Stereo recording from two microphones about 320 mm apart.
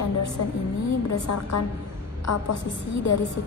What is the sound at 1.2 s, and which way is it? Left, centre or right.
Speech, left.